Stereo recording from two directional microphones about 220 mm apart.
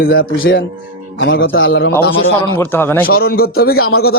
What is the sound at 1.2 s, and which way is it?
Speech, 60° left (ahead or behind).